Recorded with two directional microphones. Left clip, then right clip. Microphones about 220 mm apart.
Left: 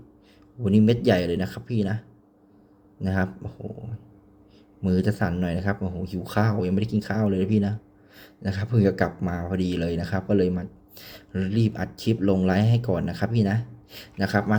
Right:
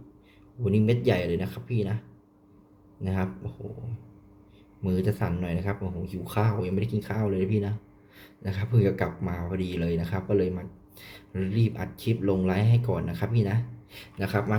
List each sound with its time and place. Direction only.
0.6 s speech: 25° left (ahead or behind)
4.8 s speech: 25° left (ahead or behind)